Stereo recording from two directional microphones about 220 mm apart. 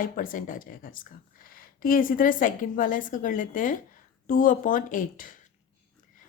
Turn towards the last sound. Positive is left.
turn(degrees=40)  # may be behind; listen again after turning